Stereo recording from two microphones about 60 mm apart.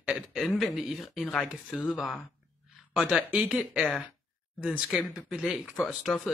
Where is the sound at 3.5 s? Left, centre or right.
Centre.